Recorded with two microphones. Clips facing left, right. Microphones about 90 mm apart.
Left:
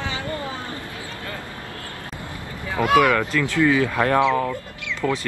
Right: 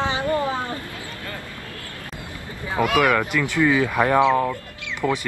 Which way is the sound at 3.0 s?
15° right (ahead or behind).